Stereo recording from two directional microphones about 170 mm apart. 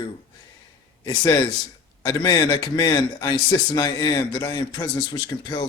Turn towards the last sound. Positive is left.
turn(degrees=25)  # may be behind; listen again after turning